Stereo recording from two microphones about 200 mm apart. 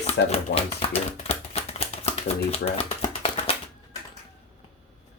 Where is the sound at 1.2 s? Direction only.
30° left (ahead or behind).